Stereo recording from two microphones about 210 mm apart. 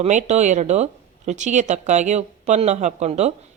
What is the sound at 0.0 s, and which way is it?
Speech, 35° right (ahead or behind).